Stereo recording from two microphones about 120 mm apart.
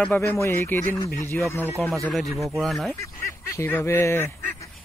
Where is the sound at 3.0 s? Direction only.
25° left (ahead or behind).